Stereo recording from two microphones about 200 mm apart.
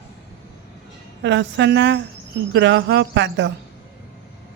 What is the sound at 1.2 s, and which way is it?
Speech, 60° right (ahead or behind).